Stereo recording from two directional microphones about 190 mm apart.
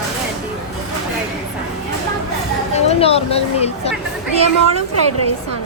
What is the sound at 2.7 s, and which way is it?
Speech, 35° left (ahead or behind).